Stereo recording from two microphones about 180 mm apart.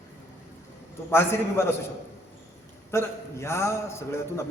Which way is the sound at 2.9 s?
15° left (ahead or behind).